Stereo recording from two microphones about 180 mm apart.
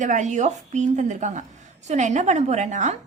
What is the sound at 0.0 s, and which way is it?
A woman's voice, 45° right (ahead or behind).